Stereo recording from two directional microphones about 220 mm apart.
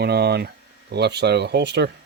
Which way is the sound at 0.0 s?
50° right (ahead or behind).